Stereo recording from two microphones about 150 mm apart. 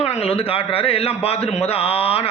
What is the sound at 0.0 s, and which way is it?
Speech, 45° left (ahead or behind).